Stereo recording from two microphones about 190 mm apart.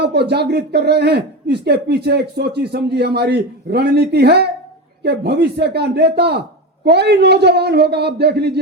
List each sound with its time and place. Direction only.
0.0 s speech: 60° right (ahead or behind)